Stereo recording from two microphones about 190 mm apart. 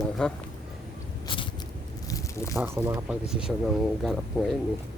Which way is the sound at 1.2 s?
25° left (ahead or behind).